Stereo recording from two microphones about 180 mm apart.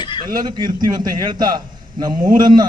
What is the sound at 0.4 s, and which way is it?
A man's voice, 25° right (ahead or behind).